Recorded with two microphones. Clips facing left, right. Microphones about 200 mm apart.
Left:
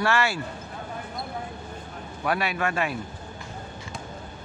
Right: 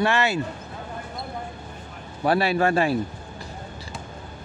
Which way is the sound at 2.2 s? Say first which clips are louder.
Right 6 dB; 30° right (ahead or behind).